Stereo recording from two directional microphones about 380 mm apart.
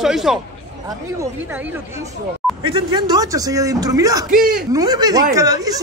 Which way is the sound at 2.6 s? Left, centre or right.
Centre.